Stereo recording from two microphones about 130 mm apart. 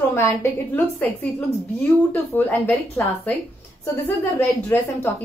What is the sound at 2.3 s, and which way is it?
A woman's voice, 15° left (ahead or behind).